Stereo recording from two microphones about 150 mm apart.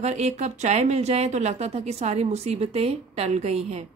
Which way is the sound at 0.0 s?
50° right (ahead or behind).